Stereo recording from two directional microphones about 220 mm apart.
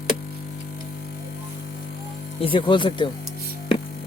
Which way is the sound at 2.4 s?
25° left (ahead or behind).